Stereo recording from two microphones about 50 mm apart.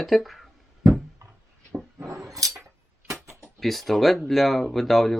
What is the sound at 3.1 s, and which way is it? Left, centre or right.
Mechanisms, right.